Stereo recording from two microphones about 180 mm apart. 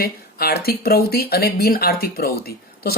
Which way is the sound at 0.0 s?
60° left (ahead or behind).